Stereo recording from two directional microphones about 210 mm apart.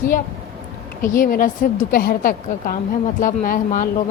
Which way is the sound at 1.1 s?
40° left (ahead or behind).